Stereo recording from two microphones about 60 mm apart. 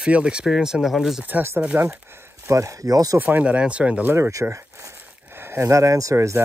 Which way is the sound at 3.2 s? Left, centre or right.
Right.